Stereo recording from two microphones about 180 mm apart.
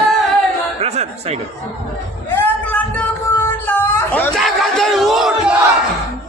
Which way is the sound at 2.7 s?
10° left (ahead or behind).